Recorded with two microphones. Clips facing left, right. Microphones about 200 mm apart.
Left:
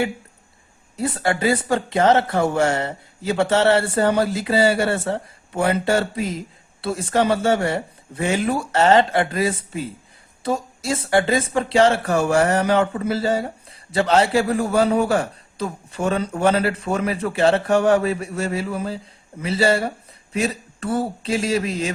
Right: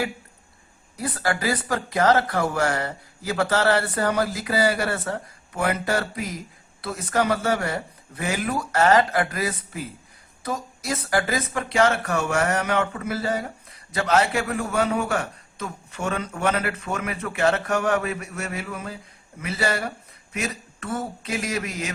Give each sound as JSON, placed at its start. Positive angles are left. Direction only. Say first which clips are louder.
{"t": 0.9, "sound": "speech", "louder": "left 4 dB", "side_deg": 25}